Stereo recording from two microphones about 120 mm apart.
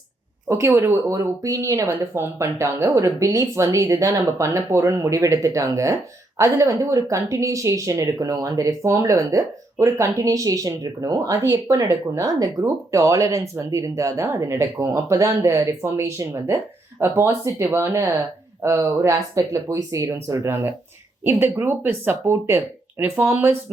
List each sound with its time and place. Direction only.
0.5 s speech: 20° right (ahead or behind)